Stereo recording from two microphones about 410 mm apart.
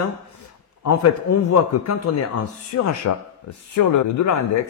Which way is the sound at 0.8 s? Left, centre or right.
Left.